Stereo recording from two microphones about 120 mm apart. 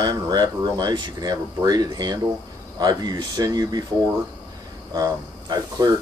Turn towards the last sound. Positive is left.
turn(degrees=-35)  # may be behind; listen again after turning